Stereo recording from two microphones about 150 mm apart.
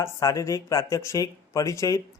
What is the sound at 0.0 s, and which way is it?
Speech, 20° left (ahead or behind).